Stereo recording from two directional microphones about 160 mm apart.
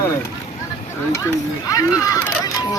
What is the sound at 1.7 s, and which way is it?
Speech, 20° left (ahead or behind).